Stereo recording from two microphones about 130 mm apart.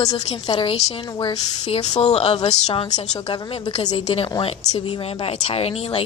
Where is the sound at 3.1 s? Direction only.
35° left (ahead or behind).